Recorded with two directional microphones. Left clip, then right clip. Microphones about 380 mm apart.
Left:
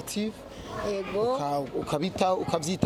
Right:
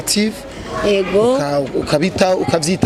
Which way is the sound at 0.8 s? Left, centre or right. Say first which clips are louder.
Right 14 dB; right.